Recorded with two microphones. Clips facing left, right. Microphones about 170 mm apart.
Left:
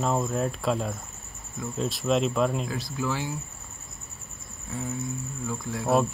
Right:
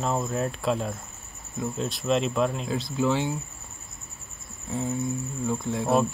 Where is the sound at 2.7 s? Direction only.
25° right (ahead or behind).